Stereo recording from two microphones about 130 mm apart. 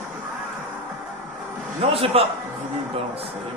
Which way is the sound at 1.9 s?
50° right (ahead or behind).